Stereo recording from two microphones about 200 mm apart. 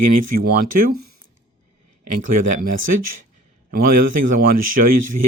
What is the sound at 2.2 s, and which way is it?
A man's voice, 45° right (ahead or behind).